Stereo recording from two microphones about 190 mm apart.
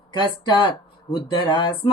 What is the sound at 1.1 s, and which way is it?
Mantra, 25° left (ahead or behind).